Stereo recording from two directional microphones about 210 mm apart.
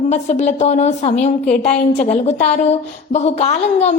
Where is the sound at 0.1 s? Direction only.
35° left (ahead or behind).